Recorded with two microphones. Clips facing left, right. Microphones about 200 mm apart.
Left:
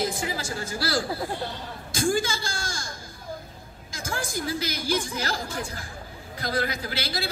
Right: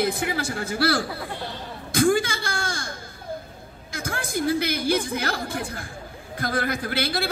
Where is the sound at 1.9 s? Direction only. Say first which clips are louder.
Right 5 dB; 60° right (ahead or behind).